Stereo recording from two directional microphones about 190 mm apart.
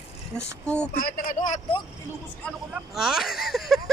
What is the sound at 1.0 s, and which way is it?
Speech, 50° left (ahead or behind).